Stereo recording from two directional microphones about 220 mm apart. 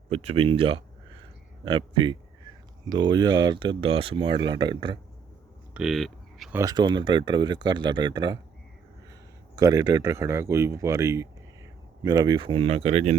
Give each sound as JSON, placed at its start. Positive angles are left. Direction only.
{"t": 0.1, "sound": "speech", "side_deg": -25}
{"t": 5.7, "sound": "speech", "side_deg": 0}
{"t": 6.6, "sound": "speech", "side_deg": -20}
{"t": 9.6, "sound": "speech", "side_deg": -15}